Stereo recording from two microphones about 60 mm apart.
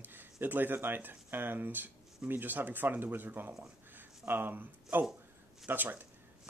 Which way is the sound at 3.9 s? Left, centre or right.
Right.